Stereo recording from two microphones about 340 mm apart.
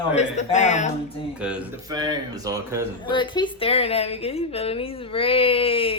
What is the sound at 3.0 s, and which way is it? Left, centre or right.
A woman's voice, centre.